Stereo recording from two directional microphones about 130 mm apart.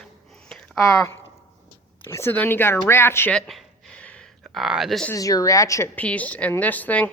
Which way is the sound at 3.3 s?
5° left (ahead or behind).